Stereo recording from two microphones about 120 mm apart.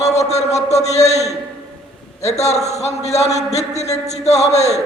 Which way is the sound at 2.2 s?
65° left (ahead or behind).